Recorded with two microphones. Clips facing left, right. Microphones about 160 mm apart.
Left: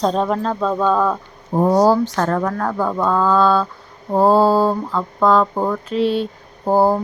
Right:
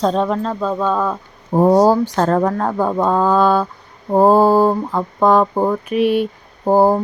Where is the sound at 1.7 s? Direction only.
15° right (ahead or behind).